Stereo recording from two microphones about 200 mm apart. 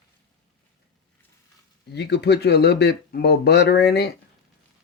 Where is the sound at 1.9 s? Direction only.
55° left (ahead or behind).